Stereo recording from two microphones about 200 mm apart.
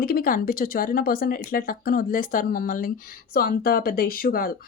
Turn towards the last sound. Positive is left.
turn(degrees=45)  # may be behind; listen again after turning